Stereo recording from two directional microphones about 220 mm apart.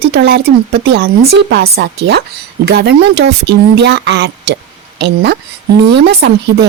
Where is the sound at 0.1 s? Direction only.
50° right (ahead or behind).